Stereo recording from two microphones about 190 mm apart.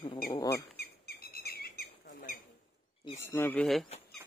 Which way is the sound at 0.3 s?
20° left (ahead or behind).